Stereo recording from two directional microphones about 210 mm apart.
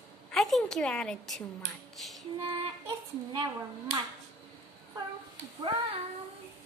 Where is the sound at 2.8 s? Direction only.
20° right (ahead or behind).